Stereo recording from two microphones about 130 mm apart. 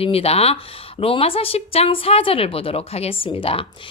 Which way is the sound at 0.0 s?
50° left (ahead or behind).